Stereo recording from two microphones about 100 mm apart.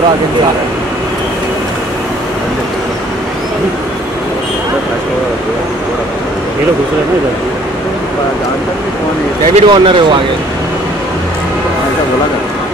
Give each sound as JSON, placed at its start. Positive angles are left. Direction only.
{"t": 9.5, "sound": "speech", "side_deg": -60}